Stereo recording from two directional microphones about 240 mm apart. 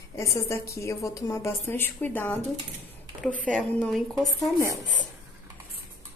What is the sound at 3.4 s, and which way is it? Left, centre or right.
A woman's voice, centre.